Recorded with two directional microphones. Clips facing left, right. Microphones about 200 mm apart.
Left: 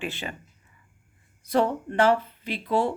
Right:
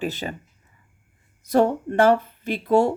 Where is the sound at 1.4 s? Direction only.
45° right (ahead or behind).